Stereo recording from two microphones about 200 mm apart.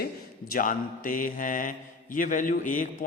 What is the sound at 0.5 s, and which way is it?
A man's voice, 40° left (ahead or behind).